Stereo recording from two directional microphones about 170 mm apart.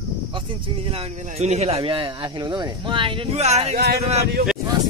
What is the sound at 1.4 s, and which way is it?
Speech, 40° right (ahead or behind).